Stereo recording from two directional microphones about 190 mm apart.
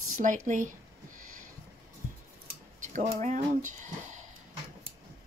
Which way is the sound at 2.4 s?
40° right (ahead or behind).